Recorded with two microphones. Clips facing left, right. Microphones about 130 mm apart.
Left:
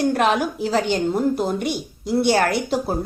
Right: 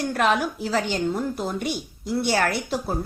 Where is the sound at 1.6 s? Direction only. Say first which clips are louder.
Left 3 dB; centre (ahead or behind).